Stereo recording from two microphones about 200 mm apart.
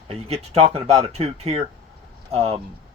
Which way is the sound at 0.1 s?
30° right (ahead or behind).